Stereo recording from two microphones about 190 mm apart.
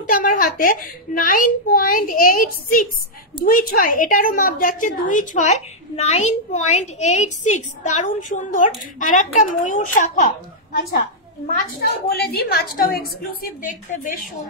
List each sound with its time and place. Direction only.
0.0 s a woman's voice: 45° left (ahead or behind)
11.8 s a woman's voice: 55° left (ahead or behind)